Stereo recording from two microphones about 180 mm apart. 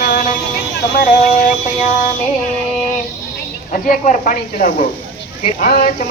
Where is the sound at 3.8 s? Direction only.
50° left (ahead or behind).